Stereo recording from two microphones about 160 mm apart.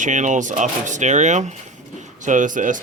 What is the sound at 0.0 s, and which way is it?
Speech, 50° right (ahead or behind).